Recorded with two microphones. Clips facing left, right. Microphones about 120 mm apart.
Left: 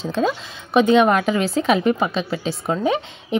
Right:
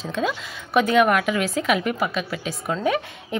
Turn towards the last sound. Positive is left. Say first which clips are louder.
# left 2 dB
turn(degrees=20)  # may be behind; listen again after turning